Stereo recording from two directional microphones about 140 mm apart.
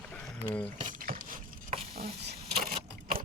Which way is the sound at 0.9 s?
80° right.